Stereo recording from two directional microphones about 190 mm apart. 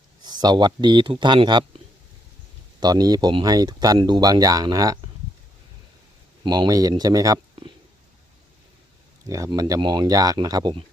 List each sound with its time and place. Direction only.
0.3 s speech: 20° right (ahead or behind)
2.8 s speech: 20° right (ahead or behind)
6.4 s speech: 20° right (ahead or behind)
9.2 s speech: 15° right (ahead or behind)